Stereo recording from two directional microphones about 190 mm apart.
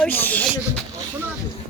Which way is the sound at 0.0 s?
10° left (ahead or behind).